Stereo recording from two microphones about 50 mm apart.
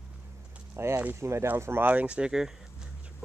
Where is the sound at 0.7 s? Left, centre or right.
Right.